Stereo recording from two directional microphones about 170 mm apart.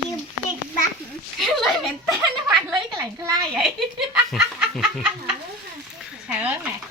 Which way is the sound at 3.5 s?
Centre (ahead or behind).